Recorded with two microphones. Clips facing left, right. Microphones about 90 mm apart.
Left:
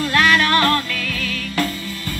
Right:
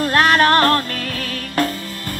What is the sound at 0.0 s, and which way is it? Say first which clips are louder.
Music: right 2 dB; 40° right (ahead or behind).